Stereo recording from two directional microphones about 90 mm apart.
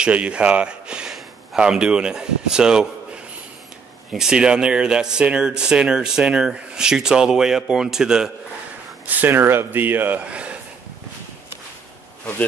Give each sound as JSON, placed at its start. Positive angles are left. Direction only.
{"t": 0.0, "sound": "speech", "side_deg": -15}
{"t": 4.1, "sound": "speech", "side_deg": -5}
{"t": 9.0, "sound": "speech", "side_deg": -20}